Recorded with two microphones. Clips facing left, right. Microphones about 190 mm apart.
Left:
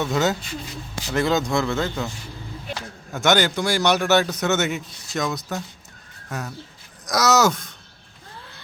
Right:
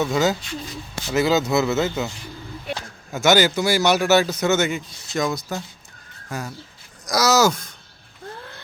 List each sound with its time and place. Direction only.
0.0 s a man's voice: centre (ahead or behind)
3.1 s a man's voice: 5° right (ahead or behind)